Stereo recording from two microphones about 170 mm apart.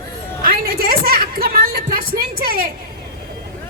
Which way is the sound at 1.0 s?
65° right (ahead or behind).